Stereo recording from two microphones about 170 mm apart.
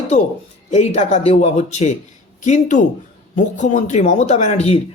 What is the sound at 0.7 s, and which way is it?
A woman's voice, 40° left (ahead or behind).